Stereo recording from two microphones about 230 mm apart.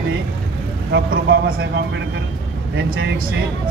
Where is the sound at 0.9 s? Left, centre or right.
Right.